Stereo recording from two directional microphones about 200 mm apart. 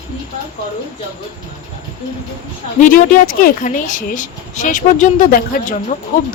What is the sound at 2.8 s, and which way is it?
Speech, 40° left (ahead or behind).